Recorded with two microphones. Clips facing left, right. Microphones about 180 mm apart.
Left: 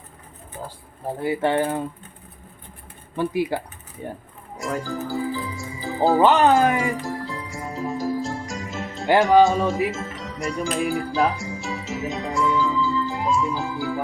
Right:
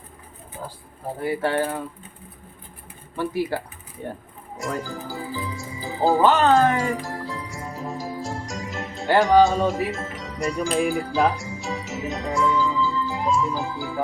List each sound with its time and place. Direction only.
1.2 s speech: 20° left (ahead or behind)
3.2 s speech: 15° left (ahead or behind)
4.5 s music: centre (ahead or behind)
6.2 s speech: 15° left (ahead or behind)
7.0 s music: centre (ahead or behind)
9.2 s speech: centre (ahead or behind)
10.9 s music: centre (ahead or behind)